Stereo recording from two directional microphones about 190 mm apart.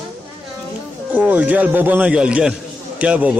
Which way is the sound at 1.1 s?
10° right (ahead or behind).